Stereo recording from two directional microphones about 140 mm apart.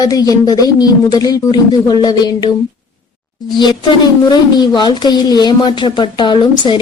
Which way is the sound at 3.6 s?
30° left (ahead or behind).